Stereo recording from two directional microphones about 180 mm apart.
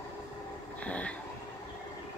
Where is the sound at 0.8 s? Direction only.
5° left (ahead or behind).